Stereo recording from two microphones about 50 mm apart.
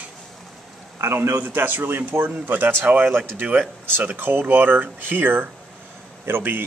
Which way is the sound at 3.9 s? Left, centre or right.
Right.